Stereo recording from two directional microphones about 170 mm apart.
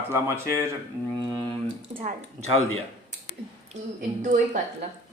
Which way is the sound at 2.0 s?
40° right (ahead or behind).